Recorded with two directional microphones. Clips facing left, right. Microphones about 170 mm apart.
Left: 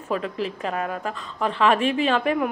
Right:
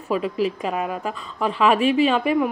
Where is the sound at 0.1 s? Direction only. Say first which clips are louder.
Right 4 dB; 10° right (ahead or behind).